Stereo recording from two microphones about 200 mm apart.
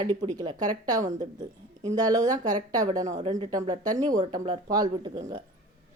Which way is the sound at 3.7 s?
20° right (ahead or behind).